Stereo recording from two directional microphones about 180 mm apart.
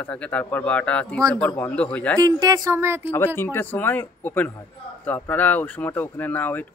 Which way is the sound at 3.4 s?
10° left (ahead or behind).